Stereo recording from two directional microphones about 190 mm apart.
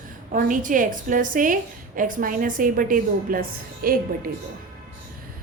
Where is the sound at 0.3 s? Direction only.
45° right (ahead or behind).